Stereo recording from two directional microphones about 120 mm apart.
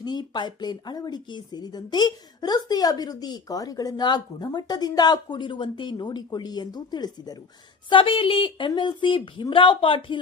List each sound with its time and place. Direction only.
0.0 s speech: 35° left (ahead or behind)
7.9 s a woman's voice: 45° left (ahead or behind)